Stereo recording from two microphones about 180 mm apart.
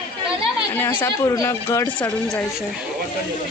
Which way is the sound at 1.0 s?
20° left (ahead or behind).